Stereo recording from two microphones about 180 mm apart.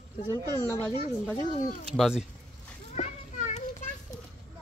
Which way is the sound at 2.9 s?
40° left (ahead or behind).